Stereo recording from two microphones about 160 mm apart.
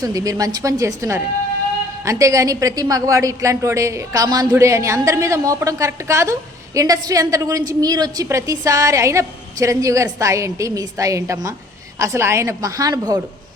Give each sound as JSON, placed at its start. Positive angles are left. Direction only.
{"t": 0.0, "sound": "a woman's voice", "side_deg": -20}